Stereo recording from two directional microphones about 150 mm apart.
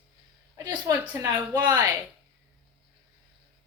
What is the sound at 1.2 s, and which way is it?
Speech, 25° right (ahead or behind).